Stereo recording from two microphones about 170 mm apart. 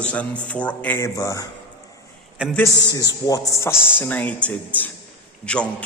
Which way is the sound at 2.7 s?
20° left (ahead or behind).